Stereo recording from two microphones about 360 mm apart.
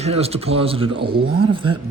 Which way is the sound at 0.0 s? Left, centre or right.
Centre.